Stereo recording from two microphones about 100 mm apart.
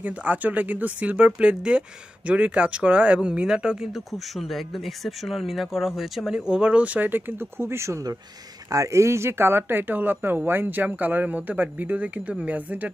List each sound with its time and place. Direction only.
0.0 s speech: 15° right (ahead or behind)